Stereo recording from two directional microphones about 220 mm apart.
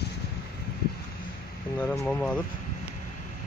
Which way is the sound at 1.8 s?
5° left (ahead or behind).